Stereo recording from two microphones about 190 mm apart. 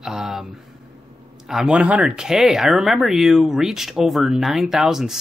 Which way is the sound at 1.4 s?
5° right (ahead or behind).